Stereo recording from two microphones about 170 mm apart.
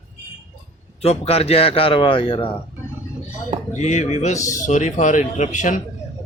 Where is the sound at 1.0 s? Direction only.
35° left (ahead or behind).